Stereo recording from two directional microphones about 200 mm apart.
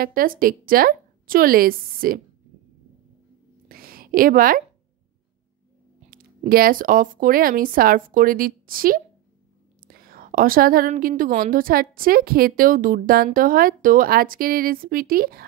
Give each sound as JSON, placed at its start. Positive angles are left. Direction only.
{"t": 0.0, "sound": "a woman's voice", "side_deg": -45}
{"t": 3.6, "sound": "a sound", "side_deg": -45}
{"t": 6.0, "sound": "a woman's voice", "side_deg": -45}